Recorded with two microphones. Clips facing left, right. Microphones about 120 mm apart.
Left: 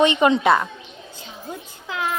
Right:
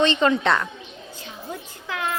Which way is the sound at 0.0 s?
15° left (ahead or behind).